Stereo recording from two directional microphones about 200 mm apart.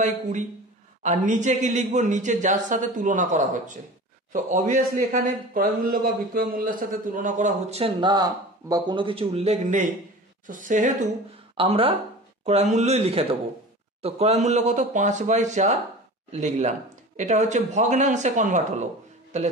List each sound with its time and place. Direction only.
1.0 s a man's voice: 40° right (ahead or behind)
11.5 s a man's voice: 25° right (ahead or behind)